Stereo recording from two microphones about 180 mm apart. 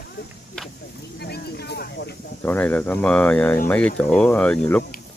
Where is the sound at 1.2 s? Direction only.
65° left (ahead or behind).